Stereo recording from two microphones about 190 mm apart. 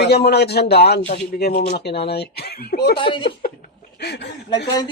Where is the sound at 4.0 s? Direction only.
60° left (ahead or behind).